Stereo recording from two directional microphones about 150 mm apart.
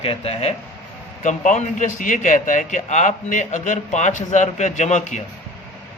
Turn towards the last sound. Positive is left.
turn(degrees=50)  # may be behind; listen again after turning